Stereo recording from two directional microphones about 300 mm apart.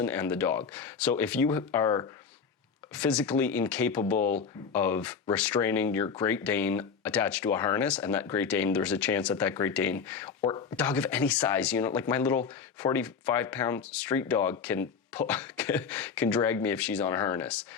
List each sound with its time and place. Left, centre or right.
0.0 s speech: centre